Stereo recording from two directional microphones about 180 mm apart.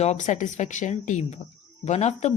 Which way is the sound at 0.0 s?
40° left (ahead or behind).